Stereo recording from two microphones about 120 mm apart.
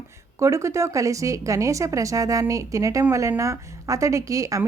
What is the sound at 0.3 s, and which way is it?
A woman's voice, 25° right (ahead or behind).